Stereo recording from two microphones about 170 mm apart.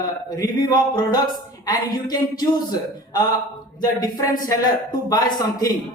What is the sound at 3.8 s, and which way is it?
A man's voice, 25° left (ahead or behind).